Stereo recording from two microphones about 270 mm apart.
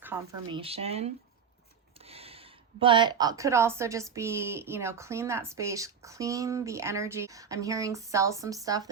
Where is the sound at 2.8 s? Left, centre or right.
Centre.